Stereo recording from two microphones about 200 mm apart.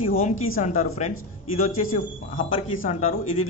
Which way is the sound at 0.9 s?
35° left (ahead or behind).